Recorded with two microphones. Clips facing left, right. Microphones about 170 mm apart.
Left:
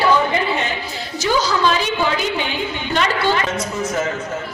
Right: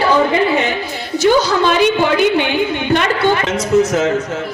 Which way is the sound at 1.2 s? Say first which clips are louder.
Right 5 dB; 60° right (ahead or behind).